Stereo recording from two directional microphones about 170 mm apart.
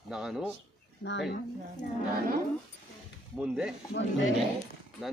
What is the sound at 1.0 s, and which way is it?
Speech, 90° left.